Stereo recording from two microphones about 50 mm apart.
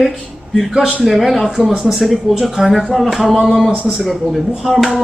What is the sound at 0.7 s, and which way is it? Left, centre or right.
A man's voice, centre.